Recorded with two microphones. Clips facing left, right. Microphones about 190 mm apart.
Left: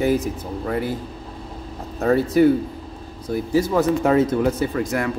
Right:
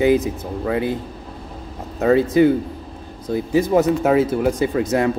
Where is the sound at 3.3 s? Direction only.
20° right (ahead or behind).